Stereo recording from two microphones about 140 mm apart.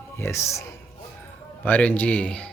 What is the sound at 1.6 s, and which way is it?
Speech, 10° left (ahead or behind).